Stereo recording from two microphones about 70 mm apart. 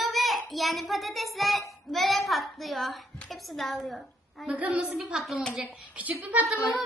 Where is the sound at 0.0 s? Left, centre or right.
Centre.